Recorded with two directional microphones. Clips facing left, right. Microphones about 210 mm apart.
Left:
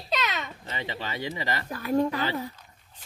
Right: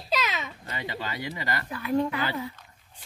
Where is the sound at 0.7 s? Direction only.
20° left (ahead or behind).